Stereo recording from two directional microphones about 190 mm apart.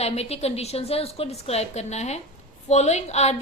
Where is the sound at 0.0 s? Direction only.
35° left (ahead or behind).